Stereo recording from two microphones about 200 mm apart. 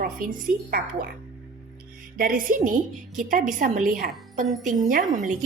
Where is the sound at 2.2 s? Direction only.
45° right (ahead or behind).